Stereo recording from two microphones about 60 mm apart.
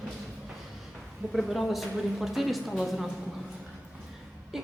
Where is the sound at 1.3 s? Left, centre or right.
Centre.